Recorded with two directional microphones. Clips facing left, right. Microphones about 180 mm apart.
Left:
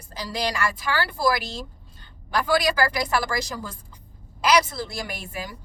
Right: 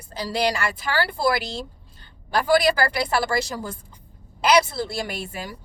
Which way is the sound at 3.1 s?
30° right (ahead or behind).